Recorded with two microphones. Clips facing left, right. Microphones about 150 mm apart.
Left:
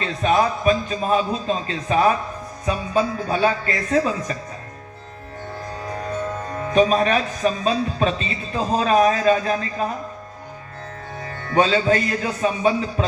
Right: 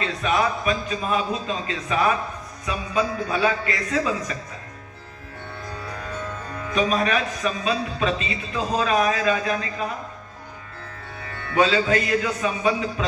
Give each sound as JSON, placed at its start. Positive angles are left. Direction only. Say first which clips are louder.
{"t": 0.0, "sound": "a man's voice", "louder": "left 3 dB", "side_deg": 35}
{"t": 5.8, "sound": "speech", "louder": "left 7 dB", "side_deg": 40}
{"t": 11.2, "sound": "a man's voice", "louder": "left 2 dB", "side_deg": 35}